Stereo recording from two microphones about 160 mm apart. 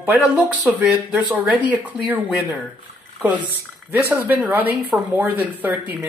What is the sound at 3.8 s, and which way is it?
Speech, 10° right (ahead or behind).